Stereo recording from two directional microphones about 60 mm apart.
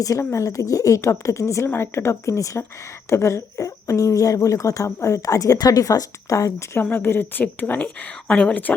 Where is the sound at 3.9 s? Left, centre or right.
Left.